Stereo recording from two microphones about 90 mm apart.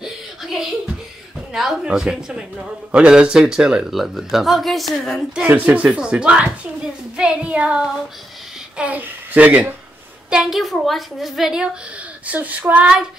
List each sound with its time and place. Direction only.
0.0 s a sound: 5° right (ahead or behind)
1.5 s a man's voice: 5° right (ahead or behind)
5.5 s a man's voice: 15° right (ahead or behind)
10.3 s a woman's voice: 5° right (ahead or behind)
12.3 s a man's voice: 15° right (ahead or behind)